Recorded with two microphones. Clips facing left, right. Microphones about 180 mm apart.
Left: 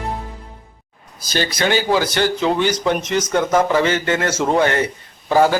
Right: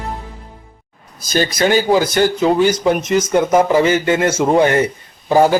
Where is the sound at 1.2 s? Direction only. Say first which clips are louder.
Right 4 dB; 45° right (ahead or behind).